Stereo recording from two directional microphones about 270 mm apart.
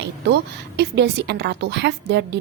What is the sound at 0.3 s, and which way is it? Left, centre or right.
A woman's voice, right.